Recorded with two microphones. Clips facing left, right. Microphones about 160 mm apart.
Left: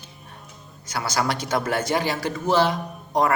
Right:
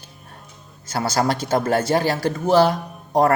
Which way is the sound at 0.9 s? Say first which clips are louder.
Right 4 dB; 30° right (ahead or behind).